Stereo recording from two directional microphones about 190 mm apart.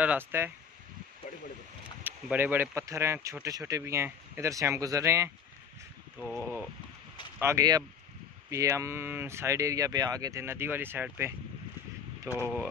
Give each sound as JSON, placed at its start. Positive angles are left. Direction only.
{"t": 0.0, "sound": "speech", "side_deg": -10}
{"t": 2.0, "sound": "speech", "side_deg": -10}
{"t": 6.1, "sound": "speech", "side_deg": 5}
{"t": 7.3, "sound": "speech", "side_deg": -15}